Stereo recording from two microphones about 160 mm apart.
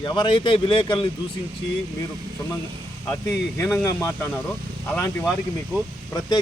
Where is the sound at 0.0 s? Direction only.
30° left (ahead or behind).